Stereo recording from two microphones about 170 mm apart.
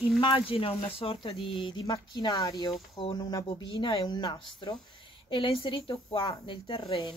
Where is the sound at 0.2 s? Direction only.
30° left (ahead or behind).